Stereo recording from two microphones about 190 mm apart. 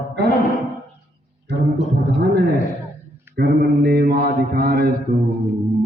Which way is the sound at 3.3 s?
55° right (ahead or behind).